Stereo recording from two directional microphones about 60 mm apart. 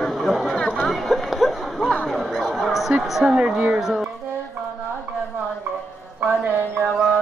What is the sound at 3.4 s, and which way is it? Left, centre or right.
Speech, centre.